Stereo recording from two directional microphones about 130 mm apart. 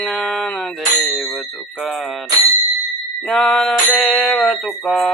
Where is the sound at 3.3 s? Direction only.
5° left (ahead or behind).